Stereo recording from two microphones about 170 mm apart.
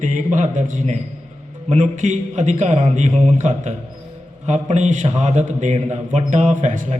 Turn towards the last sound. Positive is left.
turn(degrees=-50)  # may be behind; listen again after turning